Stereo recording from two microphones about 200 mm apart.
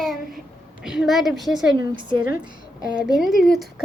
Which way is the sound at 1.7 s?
25° right (ahead or behind).